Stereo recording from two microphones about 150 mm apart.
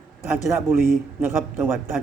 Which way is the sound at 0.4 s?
15° right (ahead or behind).